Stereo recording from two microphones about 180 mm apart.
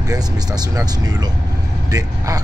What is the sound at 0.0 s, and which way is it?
Speech, 20° right (ahead or behind).